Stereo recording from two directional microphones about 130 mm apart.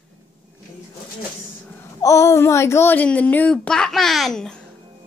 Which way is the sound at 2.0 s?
25° left (ahead or behind).